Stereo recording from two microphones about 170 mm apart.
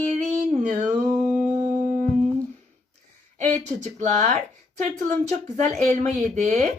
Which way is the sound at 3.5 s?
45° right (ahead or behind).